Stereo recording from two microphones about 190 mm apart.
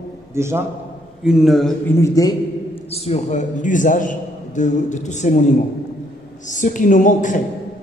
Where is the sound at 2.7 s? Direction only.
30° left (ahead or behind).